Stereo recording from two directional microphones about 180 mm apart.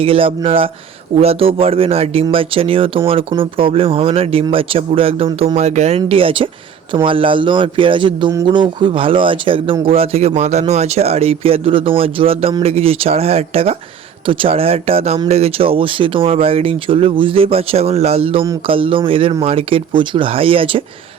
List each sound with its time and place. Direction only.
0.0 s speech: 30° right (ahead or behind)